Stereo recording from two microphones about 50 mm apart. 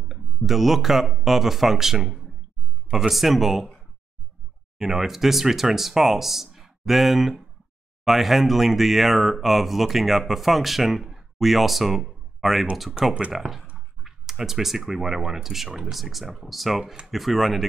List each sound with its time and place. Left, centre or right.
0.1 s speech: centre
4.7 s speech: centre
13.0 s speech: right
13.3 s speech: centre